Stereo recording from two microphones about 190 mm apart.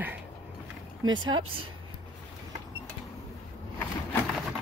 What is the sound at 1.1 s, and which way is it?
Speech, 25° right (ahead or behind).